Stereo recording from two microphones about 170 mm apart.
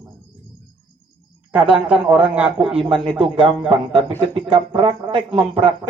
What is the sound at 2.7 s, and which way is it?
A man's voice, 30° right (ahead or behind).